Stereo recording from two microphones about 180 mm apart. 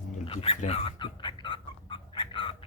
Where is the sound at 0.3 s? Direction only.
35° left (ahead or behind).